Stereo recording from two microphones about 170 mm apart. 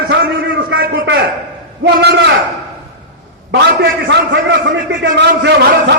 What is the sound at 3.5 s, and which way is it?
A man's voice, 90° right.